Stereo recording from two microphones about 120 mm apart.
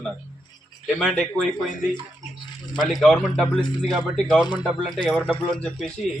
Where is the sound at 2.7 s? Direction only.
Centre (ahead or behind).